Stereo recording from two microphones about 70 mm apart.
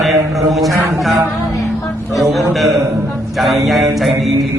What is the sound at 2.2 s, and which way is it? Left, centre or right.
Speech, centre.